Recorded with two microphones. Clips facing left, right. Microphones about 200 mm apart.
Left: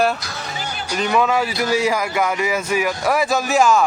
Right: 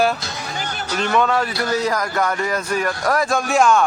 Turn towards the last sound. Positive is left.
turn(degrees=0)  # may be behind; listen again after turning